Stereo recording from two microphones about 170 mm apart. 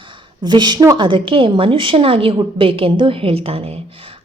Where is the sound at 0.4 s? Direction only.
25° right (ahead or behind).